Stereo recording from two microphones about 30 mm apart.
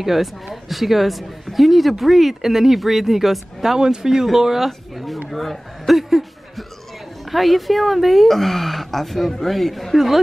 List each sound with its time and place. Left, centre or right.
0.0 s speech: centre
3.7 s speech: right
4.6 s speech: centre
5.9 s a sound: centre
7.2 s speech: centre
9.9 s speech: centre